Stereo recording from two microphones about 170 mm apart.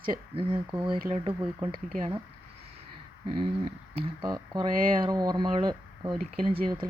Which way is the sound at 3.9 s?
25° right (ahead or behind).